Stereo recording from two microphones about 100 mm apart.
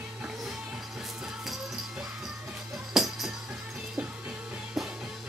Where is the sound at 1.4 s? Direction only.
Centre (ahead or behind).